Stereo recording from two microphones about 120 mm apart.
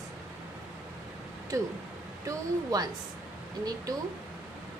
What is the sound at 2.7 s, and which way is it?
Speech, 30° right (ahead or behind).